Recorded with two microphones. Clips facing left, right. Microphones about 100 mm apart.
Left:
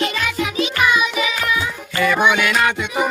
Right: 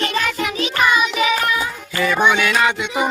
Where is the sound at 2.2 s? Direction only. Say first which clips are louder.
Right 2 dB; 10° left (ahead or behind).